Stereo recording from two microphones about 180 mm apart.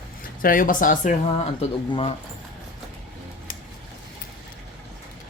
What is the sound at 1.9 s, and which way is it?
Speech, 30° left (ahead or behind).